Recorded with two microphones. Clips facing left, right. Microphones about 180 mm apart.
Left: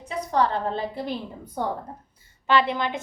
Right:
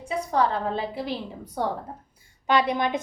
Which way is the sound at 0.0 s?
10° right (ahead or behind).